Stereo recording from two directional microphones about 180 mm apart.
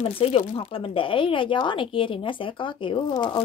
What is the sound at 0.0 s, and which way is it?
Speech, 30° left (ahead or behind).